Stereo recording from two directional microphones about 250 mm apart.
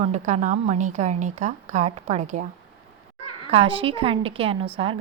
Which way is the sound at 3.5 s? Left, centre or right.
Right.